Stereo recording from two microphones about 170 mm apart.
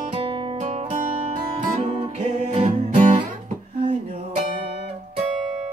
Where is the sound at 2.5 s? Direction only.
40° right (ahead or behind).